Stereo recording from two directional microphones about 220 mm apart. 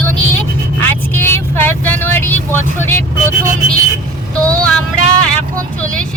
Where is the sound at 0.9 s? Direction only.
10° left (ahead or behind).